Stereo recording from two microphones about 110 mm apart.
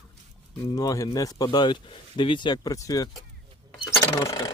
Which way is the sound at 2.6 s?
30° left (ahead or behind).